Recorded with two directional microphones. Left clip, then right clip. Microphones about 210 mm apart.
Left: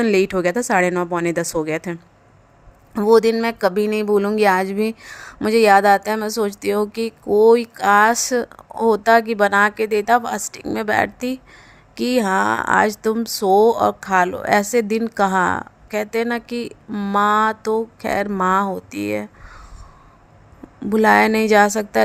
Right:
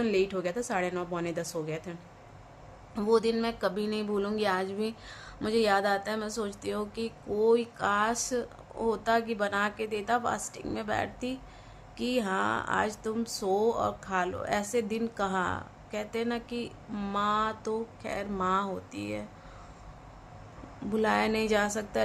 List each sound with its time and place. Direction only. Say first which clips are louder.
0.0 s speech: left 12 dB; 45° left (ahead or behind)
20.9 s speech: left 14 dB; 40° left (ahead or behind)